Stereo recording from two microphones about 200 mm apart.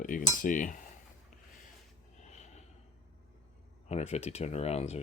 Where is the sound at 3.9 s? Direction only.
30° left (ahead or behind).